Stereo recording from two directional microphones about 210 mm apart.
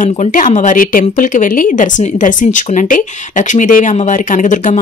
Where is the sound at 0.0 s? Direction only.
35° left (ahead or behind).